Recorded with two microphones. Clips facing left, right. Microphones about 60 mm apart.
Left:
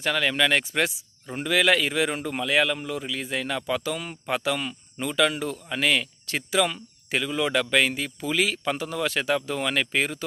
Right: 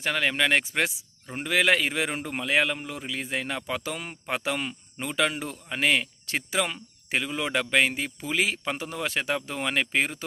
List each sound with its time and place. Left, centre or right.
0.0 s a man's voice: right